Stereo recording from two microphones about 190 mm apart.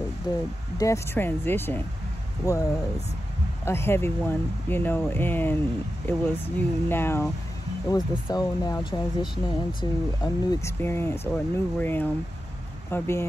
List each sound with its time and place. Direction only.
0.3 s speech: 20° left (ahead or behind)
3.6 s speech: 15° left (ahead or behind)